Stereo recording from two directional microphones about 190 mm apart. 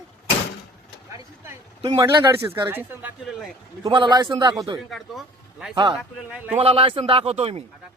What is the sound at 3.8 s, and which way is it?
Speech, 25° right (ahead or behind).